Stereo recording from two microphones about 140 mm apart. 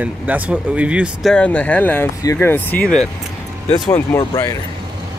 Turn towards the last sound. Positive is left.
turn(degrees=30)  # may be behind; listen again after turning